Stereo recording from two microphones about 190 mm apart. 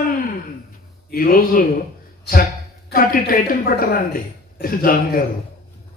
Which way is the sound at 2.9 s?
50° left (ahead or behind).